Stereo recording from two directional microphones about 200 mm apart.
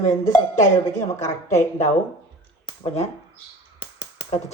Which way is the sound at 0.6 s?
35° left (ahead or behind).